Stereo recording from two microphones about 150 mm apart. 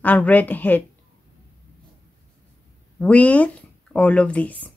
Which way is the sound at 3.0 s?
10° left (ahead or behind).